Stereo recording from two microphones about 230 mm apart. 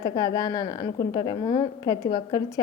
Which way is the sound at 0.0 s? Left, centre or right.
Centre.